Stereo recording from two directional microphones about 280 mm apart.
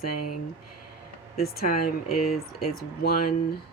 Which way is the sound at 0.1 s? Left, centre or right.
Left.